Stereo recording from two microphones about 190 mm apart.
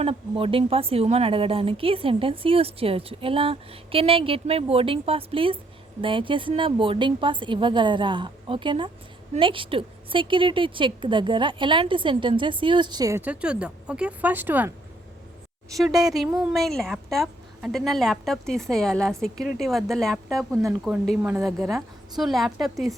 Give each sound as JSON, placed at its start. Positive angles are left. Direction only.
{"t": 0.0, "sound": "a woman's voice", "side_deg": -30}
{"t": 15.7, "sound": "speech", "side_deg": 0}